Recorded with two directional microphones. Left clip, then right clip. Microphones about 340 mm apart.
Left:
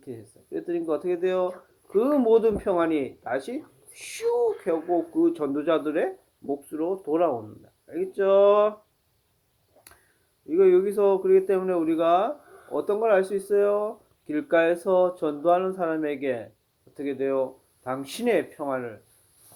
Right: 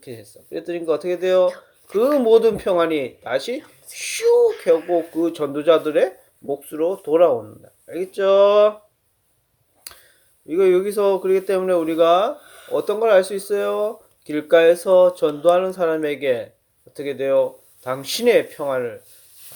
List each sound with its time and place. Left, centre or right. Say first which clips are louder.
0.0 s speech: right 4 dB; right
9.9 s a sound: right 13 dB; right
10.5 s speech: right 3 dB; right